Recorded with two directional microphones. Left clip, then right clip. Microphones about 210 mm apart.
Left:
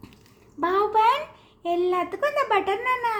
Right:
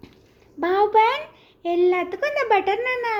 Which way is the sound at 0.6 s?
40° right (ahead or behind).